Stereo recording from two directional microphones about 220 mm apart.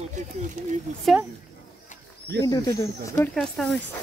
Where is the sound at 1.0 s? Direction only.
Centre (ahead or behind).